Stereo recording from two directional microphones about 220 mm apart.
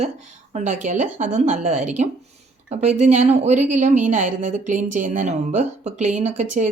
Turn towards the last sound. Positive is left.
turn(degrees=-30)  # may be behind; listen again after turning